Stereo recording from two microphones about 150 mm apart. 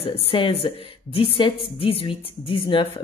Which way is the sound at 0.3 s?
40° left (ahead or behind).